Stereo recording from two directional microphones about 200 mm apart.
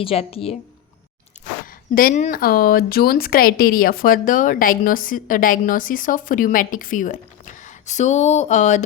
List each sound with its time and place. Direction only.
0.0 s a woman's voice: 30° left (ahead or behind)
1.6 s speech: 45° left (ahead or behind)